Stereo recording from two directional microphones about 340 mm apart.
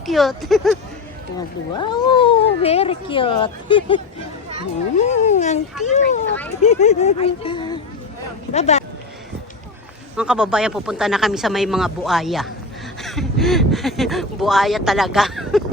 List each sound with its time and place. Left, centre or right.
0.0 s speech: centre
1.7 s speech: centre
10.2 s speech: centre